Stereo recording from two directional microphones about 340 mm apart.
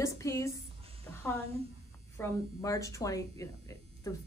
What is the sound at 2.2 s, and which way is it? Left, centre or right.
Speech, centre.